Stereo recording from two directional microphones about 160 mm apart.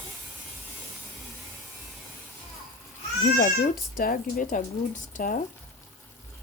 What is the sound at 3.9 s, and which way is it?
Speech, 60° left (ahead or behind).